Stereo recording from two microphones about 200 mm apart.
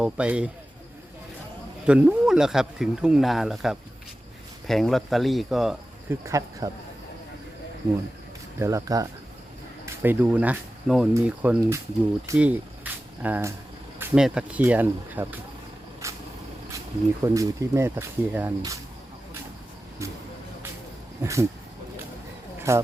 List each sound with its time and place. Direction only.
0.0 s speech: 5° right (ahead or behind)
1.9 s speech: 5° right (ahead or behind)
6.1 s speech: 15° right (ahead or behind)
8.5 s speech: 15° right (ahead or behind)
16.0 s vehicle: 15° right (ahead or behind)
17.2 s speech: 15° right (ahead or behind)
21.2 s speech: 15° right (ahead or behind)
22.5 s a sound: 15° right (ahead or behind)